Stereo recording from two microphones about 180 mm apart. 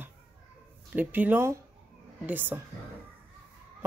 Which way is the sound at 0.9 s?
10° right (ahead or behind).